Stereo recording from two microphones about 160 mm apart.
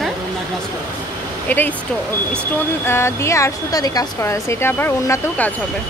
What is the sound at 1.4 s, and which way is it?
Speech, 10° left (ahead or behind).